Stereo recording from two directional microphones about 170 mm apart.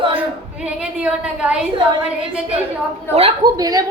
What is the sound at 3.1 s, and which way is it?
Speech, 35° right (ahead or behind).